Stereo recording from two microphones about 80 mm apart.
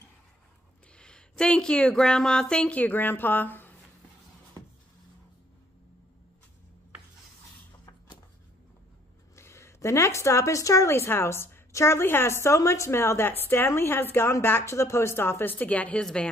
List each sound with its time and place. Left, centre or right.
0.9 s speech: centre
9.3 s a woman's voice: left; by 16.3 s centre